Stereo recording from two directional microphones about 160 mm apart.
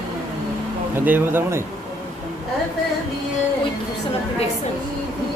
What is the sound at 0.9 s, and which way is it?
Speech, 10° right (ahead or behind).